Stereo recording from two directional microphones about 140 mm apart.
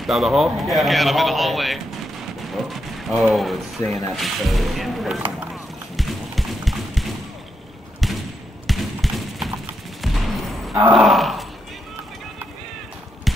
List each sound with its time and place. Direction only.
0.0 s speech: centre (ahead or behind)
5.5 s horse: centre (ahead or behind)
8.0 s a sound: centre (ahead or behind)
10.7 s grunt: 25° right (ahead or behind)
11.0 s speech: centre (ahead or behind)